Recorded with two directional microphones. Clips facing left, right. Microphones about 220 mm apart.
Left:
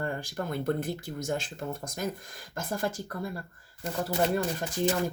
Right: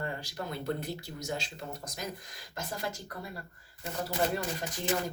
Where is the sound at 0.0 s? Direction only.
50° left (ahead or behind).